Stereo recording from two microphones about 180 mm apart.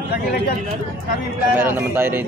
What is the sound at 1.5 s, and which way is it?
Speech, 10° right (ahead or behind).